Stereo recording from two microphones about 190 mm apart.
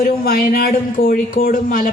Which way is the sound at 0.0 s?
50° left (ahead or behind).